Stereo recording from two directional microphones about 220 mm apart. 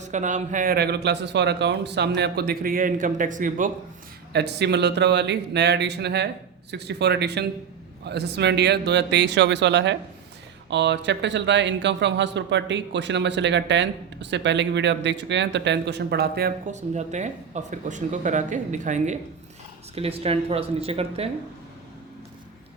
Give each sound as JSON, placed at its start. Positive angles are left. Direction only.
{"t": 0.0, "sound": "speech", "side_deg": -35}
{"t": 4.3, "sound": "speech", "side_deg": -50}
{"t": 16.7, "sound": "speech", "side_deg": -30}